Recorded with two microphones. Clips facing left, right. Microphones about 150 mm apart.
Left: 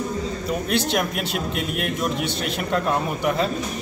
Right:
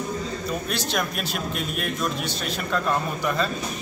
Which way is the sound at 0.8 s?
20° left (ahead or behind).